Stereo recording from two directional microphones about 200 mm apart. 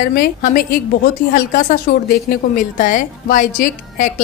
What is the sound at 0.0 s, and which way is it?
A woman's voice, 45° left (ahead or behind).